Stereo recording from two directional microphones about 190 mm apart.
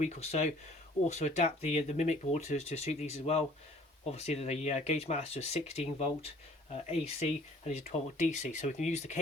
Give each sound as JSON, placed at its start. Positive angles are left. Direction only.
{"t": 0.0, "sound": "speech", "side_deg": 35}